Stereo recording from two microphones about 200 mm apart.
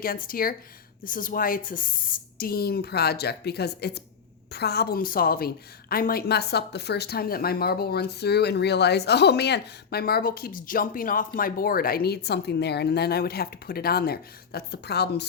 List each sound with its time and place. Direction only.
0.0 s a woman's voice: 45° left (ahead or behind)